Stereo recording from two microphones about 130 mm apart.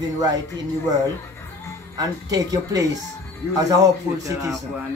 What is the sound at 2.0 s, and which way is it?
Speech, 30° right (ahead or behind).